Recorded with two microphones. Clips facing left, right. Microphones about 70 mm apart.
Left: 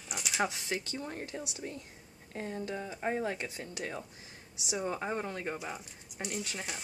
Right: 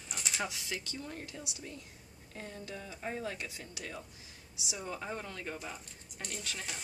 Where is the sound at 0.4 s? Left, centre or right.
Left.